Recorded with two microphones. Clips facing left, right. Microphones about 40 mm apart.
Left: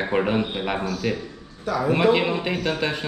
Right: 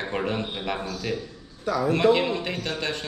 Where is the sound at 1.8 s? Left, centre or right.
Centre.